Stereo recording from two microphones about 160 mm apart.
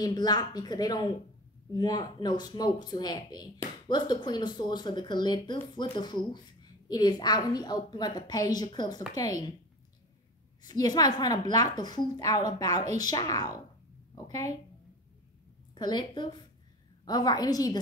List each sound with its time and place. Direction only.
0.0 s speech: 25° left (ahead or behind)
10.6 s speech: 25° left (ahead or behind)
15.7 s a woman's voice: 30° left (ahead or behind)